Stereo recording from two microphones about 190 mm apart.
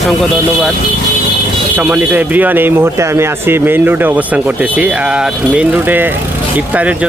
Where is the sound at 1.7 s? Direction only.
10° right (ahead or behind).